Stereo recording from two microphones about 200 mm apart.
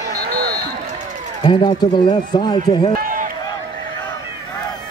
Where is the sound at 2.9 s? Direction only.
45° right (ahead or behind).